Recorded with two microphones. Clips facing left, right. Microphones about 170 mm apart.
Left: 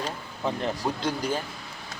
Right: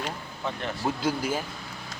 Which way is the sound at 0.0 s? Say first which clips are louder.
Left 2 dB; 35° left (ahead or behind).